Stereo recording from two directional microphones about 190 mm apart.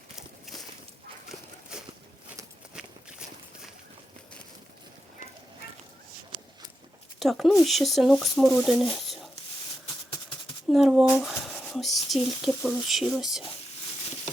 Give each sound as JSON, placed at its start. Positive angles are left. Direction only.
{"t": 0.2, "sound": "walk", "side_deg": 0}
{"t": 1.7, "sound": "a sound", "side_deg": -5}
{"t": 2.7, "sound": "walk", "side_deg": -5}
{"t": 7.2, "sound": "speech", "side_deg": 0}
{"t": 10.1, "sound": "maraca", "side_deg": 25}
{"t": 10.7, "sound": "speech", "side_deg": 0}